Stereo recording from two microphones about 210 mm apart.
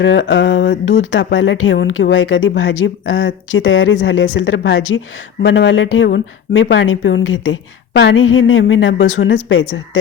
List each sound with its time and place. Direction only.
0.0 s speech: 55° left (ahead or behind)